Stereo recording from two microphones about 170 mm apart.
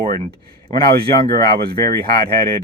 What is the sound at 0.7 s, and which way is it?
Speech, 25° left (ahead or behind).